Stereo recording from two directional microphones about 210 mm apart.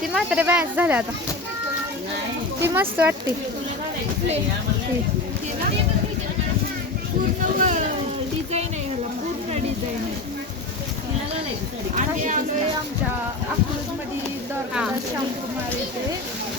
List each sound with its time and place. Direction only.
0.0 s speech: centre (ahead or behind)
2.6 s speech: 10° right (ahead or behind)
7.4 s a sound: 40° right (ahead or behind)
11.9 s speech: 40° right (ahead or behind)